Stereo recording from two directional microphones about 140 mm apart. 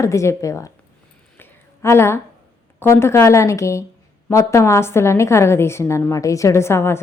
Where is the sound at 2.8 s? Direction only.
20° left (ahead or behind).